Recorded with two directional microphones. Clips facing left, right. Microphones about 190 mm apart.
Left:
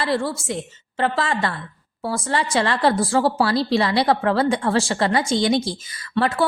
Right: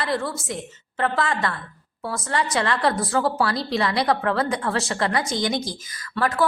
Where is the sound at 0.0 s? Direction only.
30° left (ahead or behind).